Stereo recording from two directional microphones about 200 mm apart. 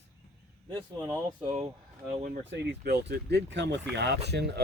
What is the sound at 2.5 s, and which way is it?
Speech, 55° right (ahead or behind).